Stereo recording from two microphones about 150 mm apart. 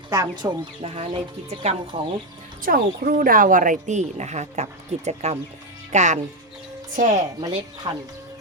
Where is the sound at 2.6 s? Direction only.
70° right (ahead or behind).